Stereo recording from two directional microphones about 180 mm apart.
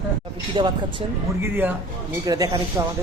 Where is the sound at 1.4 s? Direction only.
10° right (ahead or behind).